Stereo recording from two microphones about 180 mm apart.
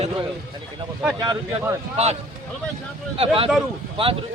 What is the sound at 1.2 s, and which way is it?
Speech, 20° right (ahead or behind).